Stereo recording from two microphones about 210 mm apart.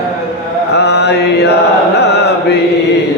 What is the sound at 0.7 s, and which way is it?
Mantra, 55° left (ahead or behind).